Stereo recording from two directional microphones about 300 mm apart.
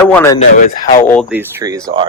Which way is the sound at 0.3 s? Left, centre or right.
Left.